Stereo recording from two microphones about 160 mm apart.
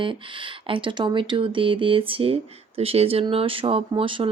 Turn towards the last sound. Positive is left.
turn(degrees=-35)  # may be behind; listen again after turning